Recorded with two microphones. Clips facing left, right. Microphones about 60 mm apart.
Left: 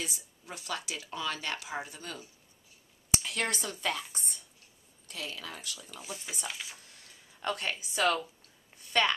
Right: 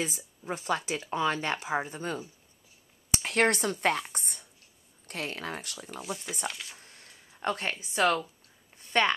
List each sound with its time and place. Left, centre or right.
0.0 s speech: right
3.2 s speech: right
5.9 s speech: centre
6.8 s a sound: right
7.4 s speech: right